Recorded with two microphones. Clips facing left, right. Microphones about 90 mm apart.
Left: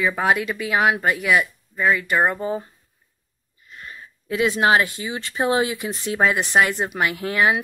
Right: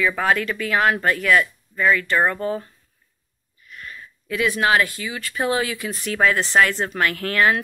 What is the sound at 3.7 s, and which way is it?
Speech, 25° left (ahead or behind).